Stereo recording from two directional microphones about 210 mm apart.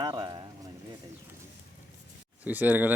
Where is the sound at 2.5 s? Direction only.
10° right (ahead or behind).